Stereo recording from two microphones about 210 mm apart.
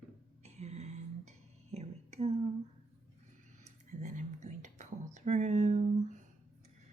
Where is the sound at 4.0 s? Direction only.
35° right (ahead or behind).